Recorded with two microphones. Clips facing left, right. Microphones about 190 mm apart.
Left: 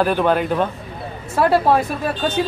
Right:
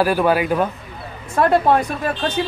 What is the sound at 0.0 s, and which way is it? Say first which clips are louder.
Speech: right 1 dB; 5° right (ahead or behind).